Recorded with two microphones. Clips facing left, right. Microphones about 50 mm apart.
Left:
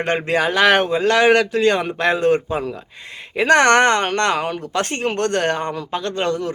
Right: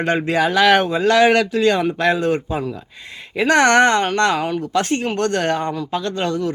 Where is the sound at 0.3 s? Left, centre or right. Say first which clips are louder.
Right 1 dB; left.